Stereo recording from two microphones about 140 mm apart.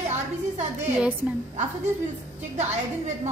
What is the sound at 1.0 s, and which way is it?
Speech, 10° right (ahead or behind).